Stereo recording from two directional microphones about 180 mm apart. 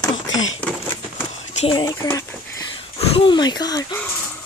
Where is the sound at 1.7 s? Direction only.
20° left (ahead or behind).